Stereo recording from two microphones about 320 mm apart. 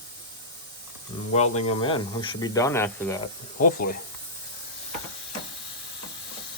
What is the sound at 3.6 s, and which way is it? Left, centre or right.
Speech, left.